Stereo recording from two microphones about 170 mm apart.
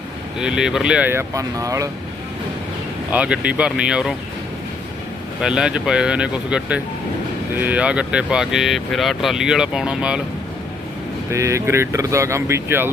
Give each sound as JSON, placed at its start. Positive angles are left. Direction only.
{"t": 0.3, "sound": "speech", "side_deg": -5}
{"t": 3.1, "sound": "speech", "side_deg": -5}
{"t": 5.4, "sound": "speech", "side_deg": -5}
{"t": 11.3, "sound": "speech", "side_deg": -15}